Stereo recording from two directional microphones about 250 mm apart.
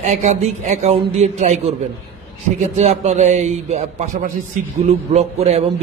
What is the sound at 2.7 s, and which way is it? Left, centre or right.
A man's voice, right.